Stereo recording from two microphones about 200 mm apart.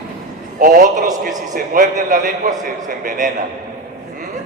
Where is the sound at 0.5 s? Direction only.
40° right (ahead or behind).